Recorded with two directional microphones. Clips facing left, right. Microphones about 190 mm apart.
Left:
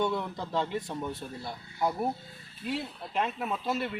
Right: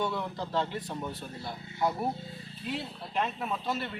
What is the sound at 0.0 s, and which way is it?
Speech, centre (ahead or behind).